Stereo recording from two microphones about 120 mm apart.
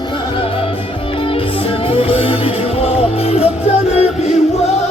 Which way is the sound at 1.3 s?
50° left (ahead or behind).